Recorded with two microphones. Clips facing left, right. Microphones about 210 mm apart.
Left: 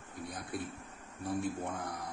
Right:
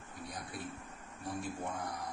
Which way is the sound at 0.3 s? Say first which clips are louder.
Left 5 dB; 55° left (ahead or behind).